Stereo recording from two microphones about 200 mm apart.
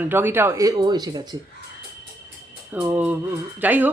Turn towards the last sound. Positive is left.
turn(degrees=-10)  # may be behind; listen again after turning